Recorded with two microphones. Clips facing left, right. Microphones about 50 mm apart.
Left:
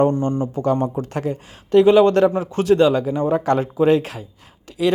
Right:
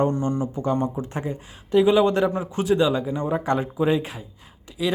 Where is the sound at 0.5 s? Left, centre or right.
Left.